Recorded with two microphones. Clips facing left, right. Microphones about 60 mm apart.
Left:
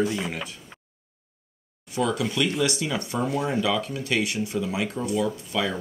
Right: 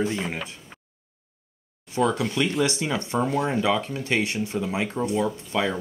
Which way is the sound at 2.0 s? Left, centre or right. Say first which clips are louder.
Right 2 dB; right.